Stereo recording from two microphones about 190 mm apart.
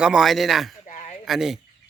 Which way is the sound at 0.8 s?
35° left (ahead or behind).